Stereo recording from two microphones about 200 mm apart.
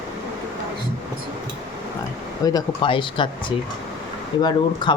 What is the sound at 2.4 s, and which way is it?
Speech, 20° left (ahead or behind).